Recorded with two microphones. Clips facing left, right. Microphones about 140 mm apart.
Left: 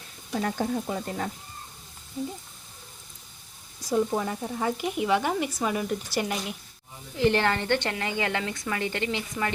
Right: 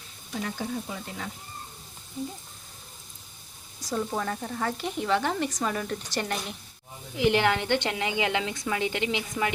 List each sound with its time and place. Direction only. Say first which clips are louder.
0.3 s sizzle: left 5 dB; 50° left (ahead or behind)
3.9 s speech: left 4 dB; 15° left (ahead or behind)
7.2 s a woman's voice: even; 15° right (ahead or behind)